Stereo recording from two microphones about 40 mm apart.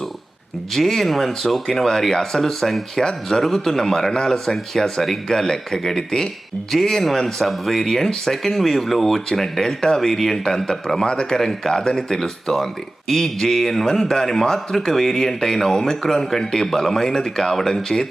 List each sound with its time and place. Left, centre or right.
0.7 s speech: centre
11.3 s speech: centre